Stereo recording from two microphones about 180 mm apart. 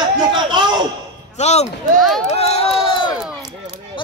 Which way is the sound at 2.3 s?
35° left (ahead or behind).